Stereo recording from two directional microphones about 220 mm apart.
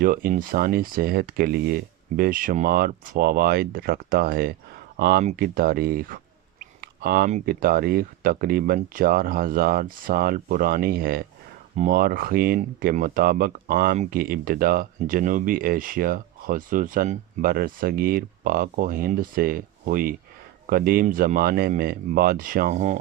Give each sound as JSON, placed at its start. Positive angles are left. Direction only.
{"t": 0.0, "sound": "speech", "side_deg": -40}